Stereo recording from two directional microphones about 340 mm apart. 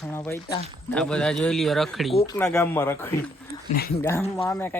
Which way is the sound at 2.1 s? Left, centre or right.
Centre.